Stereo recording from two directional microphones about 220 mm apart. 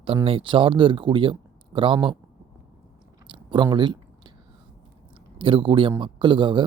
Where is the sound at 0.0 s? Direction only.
25° right (ahead or behind).